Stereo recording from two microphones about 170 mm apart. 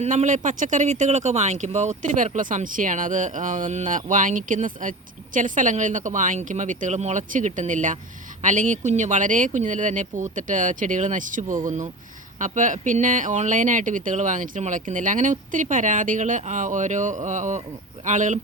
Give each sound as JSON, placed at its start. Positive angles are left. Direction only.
{"t": 0.0, "sound": "speech", "side_deg": -45}